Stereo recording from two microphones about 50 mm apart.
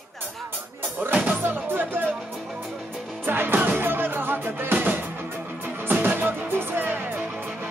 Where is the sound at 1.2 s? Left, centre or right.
Right.